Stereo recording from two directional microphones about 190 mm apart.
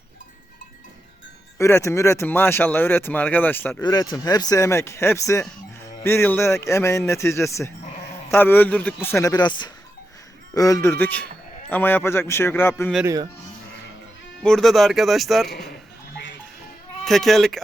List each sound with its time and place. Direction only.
1.5 s speech: 15° left (ahead or behind)
3.8 s speech: 20° left (ahead or behind)
14.4 s speech: centre (ahead or behind)
17.1 s speech: centre (ahead or behind)